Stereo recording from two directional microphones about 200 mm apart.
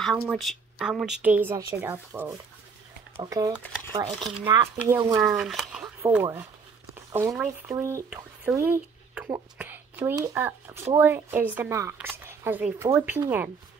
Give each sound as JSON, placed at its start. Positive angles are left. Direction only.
{"t": 0.0, "sound": "speech", "side_deg": 5}
{"t": 3.9, "sound": "a woman's voice", "side_deg": -30}
{"t": 5.2, "sound": "speech", "side_deg": 0}
{"t": 7.1, "sound": "a woman's voice", "side_deg": -15}